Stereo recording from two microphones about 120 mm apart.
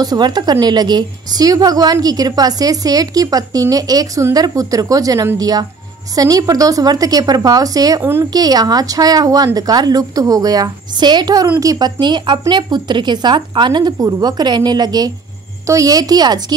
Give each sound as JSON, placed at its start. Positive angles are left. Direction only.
{"t": 0.0, "sound": "a woman's voice", "side_deg": -35}
{"t": 8.0, "sound": "a woman's voice", "side_deg": -20}
{"t": 8.3, "sound": "a woman's voice", "side_deg": -35}